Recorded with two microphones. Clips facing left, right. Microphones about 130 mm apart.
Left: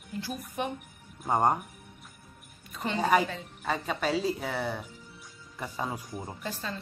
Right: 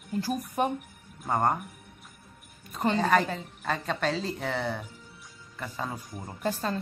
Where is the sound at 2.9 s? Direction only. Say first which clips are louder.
Left 1 dB; 10° left (ahead or behind).